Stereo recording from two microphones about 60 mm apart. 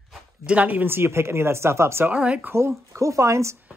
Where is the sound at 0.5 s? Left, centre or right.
Right.